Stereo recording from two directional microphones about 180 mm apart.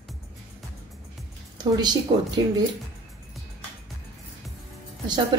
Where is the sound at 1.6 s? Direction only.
20° right (ahead or behind).